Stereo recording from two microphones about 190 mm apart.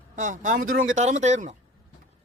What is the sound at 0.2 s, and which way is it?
A man's voice, 40° right (ahead or behind).